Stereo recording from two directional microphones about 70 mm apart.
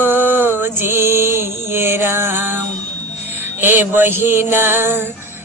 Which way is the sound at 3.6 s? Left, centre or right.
Right.